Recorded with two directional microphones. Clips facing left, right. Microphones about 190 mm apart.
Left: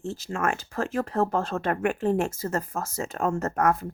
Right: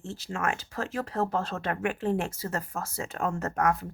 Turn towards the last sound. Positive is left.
turn(degrees=45)  # may be behind; listen again after turning